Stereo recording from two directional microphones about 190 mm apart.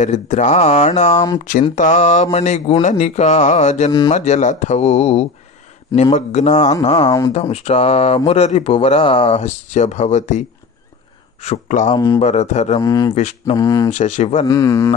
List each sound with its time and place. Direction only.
0.0 s speech: 40° left (ahead or behind)
7.1 s speech: 20° left (ahead or behind)
7.3 s speech: 35° left (ahead or behind)
11.4 s speech: 40° left (ahead or behind)
11.9 s speech: 20° left (ahead or behind)
12.2 s speech: 35° left (ahead or behind)
12.8 s speech: 20° left (ahead or behind)
13.1 s speech: 35° left (ahead or behind)
13.6 s speech: 20° left (ahead or behind)
13.8 s speech: 35° left (ahead or behind)
14.4 s speech: 15° left (ahead or behind)